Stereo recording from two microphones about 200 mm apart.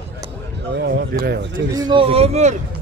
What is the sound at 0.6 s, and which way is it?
Speech, 60° right (ahead or behind).